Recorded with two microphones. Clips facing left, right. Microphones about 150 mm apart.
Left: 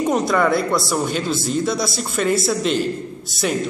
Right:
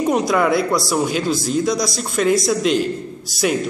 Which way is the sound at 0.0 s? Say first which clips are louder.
Right 1 dB; centre (ahead or behind).